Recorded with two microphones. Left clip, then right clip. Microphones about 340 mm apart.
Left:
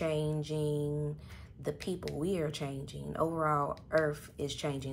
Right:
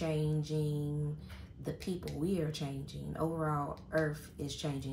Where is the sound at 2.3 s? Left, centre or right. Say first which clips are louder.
Left 2 dB; left.